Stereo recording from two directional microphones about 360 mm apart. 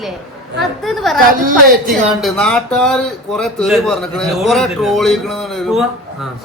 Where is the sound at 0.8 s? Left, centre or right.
Centre.